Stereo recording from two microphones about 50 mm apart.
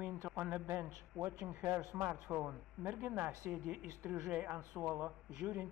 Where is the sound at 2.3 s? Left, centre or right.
Right.